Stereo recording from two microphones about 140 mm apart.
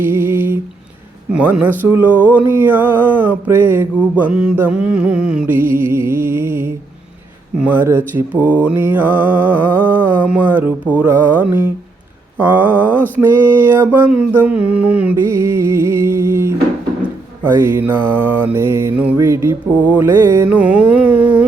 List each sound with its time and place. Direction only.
0.0 s humming: 15° right (ahead or behind)
1.3 s mantra: 10° right (ahead or behind)